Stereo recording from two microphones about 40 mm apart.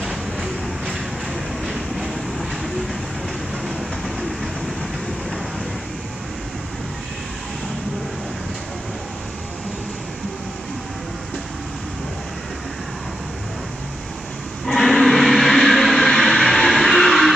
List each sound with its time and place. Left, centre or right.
0.0 s train: centre
1.6 s vehicle: centre
3.6 s train: centre
14.7 s a sound: centre